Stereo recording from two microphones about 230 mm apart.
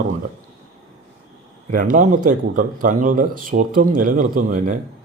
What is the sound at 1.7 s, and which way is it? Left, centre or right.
Speech, right.